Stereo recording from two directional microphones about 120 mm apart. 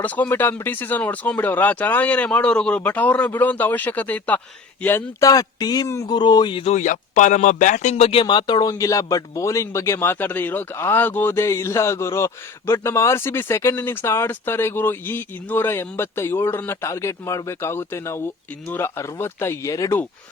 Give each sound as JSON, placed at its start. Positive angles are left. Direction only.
{"t": 0.0, "sound": "speech", "side_deg": 15}
{"t": 5.2, "sound": "a man's voice", "side_deg": 30}
{"t": 6.7, "sound": "speech", "side_deg": 90}
{"t": 8.2, "sound": "speech", "side_deg": 40}